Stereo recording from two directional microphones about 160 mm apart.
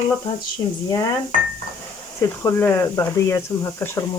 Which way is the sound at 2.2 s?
15° left (ahead or behind).